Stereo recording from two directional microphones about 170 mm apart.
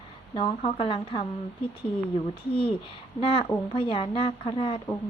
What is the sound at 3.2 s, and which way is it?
Speech, 30° left (ahead or behind).